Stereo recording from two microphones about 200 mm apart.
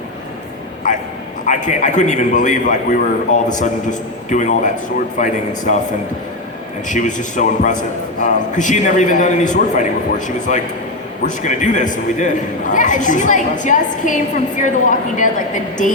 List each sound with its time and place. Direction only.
1.5 s a man's voice: 40° left (ahead or behind)
4.3 s a man's voice: 40° left (ahead or behind)
6.8 s a man's voice: 40° left (ahead or behind)